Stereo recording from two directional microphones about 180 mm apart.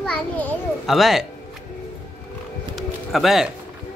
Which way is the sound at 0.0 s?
5° left (ahead or behind).